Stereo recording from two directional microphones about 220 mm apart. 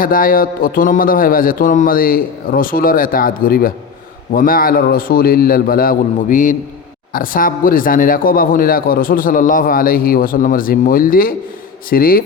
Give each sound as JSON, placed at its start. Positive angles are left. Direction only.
{"t": 0.0, "sound": "speech", "side_deg": 40}